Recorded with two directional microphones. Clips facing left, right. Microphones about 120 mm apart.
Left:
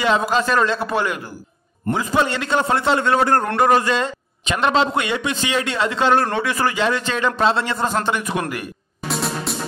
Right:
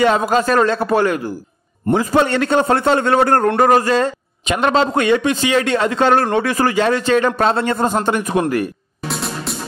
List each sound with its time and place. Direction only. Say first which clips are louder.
0.5 s a man's voice: right 4 dB; 45° right (ahead or behind)
3.4 s a man's voice: right 4 dB; 35° right (ahead or behind)
6.2 s a man's voice: right 4 dB; 30° right (ahead or behind)
9.0 s music: even; centre (ahead or behind)